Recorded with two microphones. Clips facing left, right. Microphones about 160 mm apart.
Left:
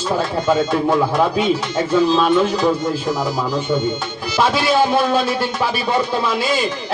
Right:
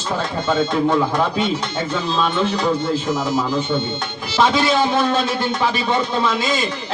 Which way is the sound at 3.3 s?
10° left (ahead or behind).